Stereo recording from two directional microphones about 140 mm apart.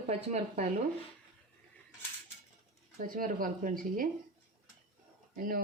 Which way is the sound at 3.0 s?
85° right.